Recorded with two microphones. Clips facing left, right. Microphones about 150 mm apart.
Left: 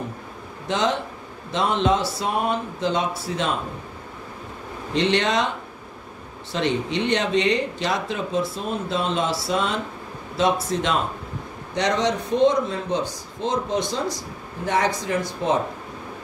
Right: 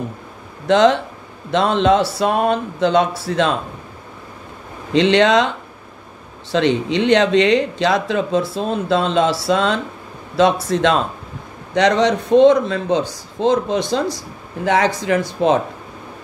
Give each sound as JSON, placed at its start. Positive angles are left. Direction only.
{"t": 0.7, "sound": "speech", "side_deg": -75}
{"t": 4.9, "sound": "speech", "side_deg": -90}
{"t": 6.5, "sound": "speech", "side_deg": -90}
{"t": 10.3, "sound": "speech", "side_deg": -80}